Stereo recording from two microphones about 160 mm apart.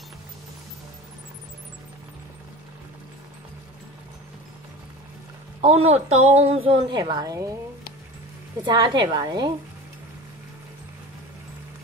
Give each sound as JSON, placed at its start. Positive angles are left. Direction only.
{"t": 5.6, "sound": "a woman's voice", "side_deg": -40}
{"t": 8.6, "sound": "a woman's voice", "side_deg": -30}